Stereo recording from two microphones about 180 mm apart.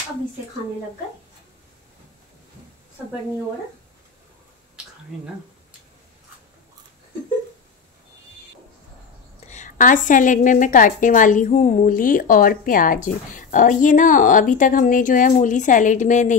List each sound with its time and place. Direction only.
9.5 s a woman's voice: 45° left (ahead or behind)